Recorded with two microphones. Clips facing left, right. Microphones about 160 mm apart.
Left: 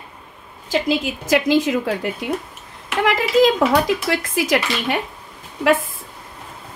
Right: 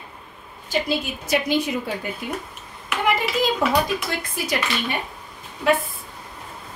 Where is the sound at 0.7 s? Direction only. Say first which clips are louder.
Left 4 dB; 90° left.